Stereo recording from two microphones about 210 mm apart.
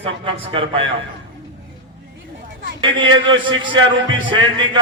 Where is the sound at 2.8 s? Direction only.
25° right (ahead or behind).